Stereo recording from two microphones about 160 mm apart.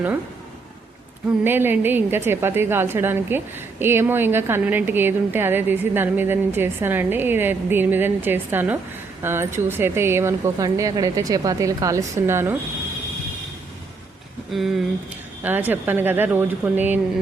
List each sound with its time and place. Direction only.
1.5 s a woman's voice: 15° right (ahead or behind)
14.5 s speech: centre (ahead or behind)
15.4 s a woman's voice: 10° right (ahead or behind)